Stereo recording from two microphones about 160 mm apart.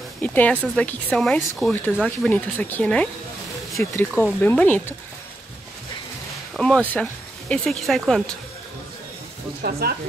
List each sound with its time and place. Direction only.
0.2 s speech: 10° left (ahead or behind)
6.5 s speech: 5° left (ahead or behind)
9.6 s speech: 70° right (ahead or behind)